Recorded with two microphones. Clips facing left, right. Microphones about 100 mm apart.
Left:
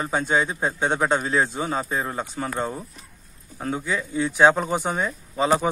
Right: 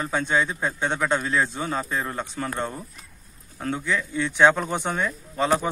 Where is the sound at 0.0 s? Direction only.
15° left (ahead or behind).